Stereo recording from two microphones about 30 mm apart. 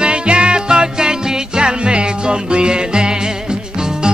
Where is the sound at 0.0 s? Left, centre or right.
Right.